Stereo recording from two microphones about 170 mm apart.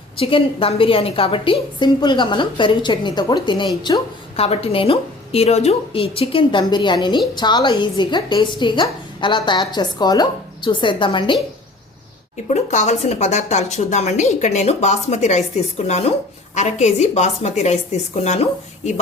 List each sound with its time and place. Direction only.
0.2 s a woman's voice: 30° left (ahead or behind)
4.4 s a woman's voice: 35° left (ahead or behind)
12.5 s a woman's voice: 40° left (ahead or behind)